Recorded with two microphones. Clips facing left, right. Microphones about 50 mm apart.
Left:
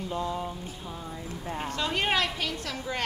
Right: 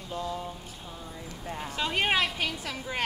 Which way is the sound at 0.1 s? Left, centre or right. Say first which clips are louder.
Left 1 dB; centre.